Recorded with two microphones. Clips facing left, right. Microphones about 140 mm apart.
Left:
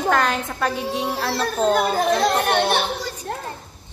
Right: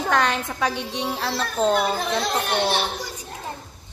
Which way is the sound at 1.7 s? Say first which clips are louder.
Left 3 dB; 50° left (ahead or behind).